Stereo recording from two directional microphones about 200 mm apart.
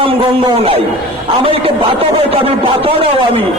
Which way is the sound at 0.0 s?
25° right (ahead or behind).